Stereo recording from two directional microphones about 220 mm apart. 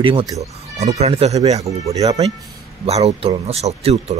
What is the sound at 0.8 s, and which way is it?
Speech, 30° right (ahead or behind).